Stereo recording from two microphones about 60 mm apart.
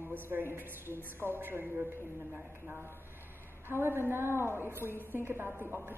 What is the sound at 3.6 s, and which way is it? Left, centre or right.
A woman's voice, right.